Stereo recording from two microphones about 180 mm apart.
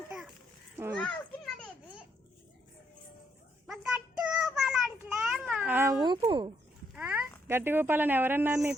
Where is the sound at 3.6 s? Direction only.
5° right (ahead or behind).